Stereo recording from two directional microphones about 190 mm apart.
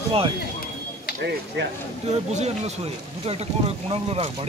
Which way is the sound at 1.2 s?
60° right (ahead or behind).